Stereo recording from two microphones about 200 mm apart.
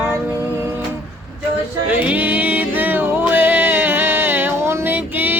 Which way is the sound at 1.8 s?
5° right (ahead or behind).